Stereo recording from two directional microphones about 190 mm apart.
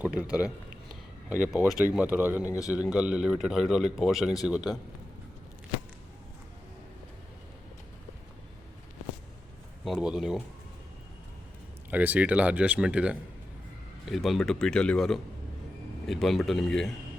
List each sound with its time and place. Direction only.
0.0 s a man's voice: 5° right (ahead or behind)
2.4 s a man's voice: 15° left (ahead or behind)
2.7 s a man's voice: 5° right (ahead or behind)
9.8 s a man's voice: 5° right (ahead or behind)
11.9 s a man's voice: 10° right (ahead or behind)